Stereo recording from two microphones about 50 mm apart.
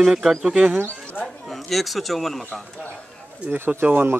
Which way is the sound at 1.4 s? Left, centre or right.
Centre.